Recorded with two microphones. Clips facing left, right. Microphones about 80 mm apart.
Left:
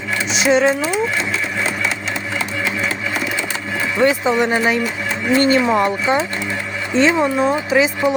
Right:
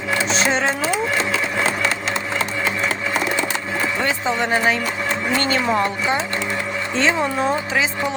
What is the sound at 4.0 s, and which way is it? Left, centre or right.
Speech, centre.